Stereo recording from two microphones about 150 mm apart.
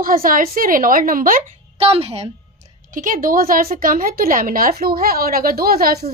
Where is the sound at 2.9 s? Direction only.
60° right (ahead or behind).